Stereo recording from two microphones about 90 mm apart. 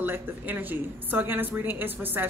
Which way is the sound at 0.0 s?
20° right (ahead or behind).